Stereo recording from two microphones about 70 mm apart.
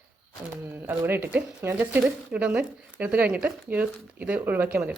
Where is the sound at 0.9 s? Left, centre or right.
Right.